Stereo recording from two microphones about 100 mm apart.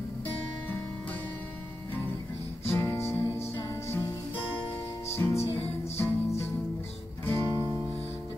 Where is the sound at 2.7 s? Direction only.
25° left (ahead or behind).